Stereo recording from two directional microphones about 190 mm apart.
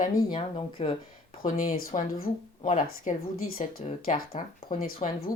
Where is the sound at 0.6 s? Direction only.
30° left (ahead or behind).